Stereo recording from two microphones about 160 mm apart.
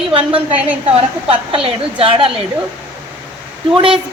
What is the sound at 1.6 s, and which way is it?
Speech, 35° right (ahead or behind).